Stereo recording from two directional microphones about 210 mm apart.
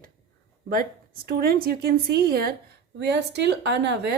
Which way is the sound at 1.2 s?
45° right (ahead or behind).